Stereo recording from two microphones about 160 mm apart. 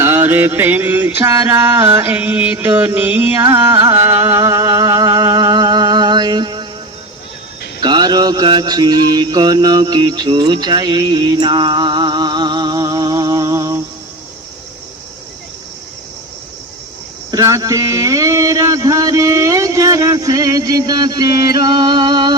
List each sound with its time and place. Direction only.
0.0 s music: 15° right (ahead or behind)
3.4 s mantra: 15° right (ahead or behind)
7.8 s mantra: 25° right (ahead or behind)
17.3 s mantra: 20° right (ahead or behind)